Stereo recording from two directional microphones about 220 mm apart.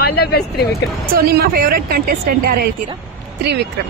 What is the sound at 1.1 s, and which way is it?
Speech, 45° right (ahead or behind).